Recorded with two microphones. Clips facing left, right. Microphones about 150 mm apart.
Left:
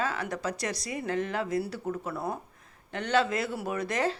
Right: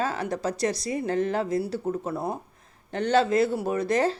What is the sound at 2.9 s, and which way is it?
Speech, 35° right (ahead or behind).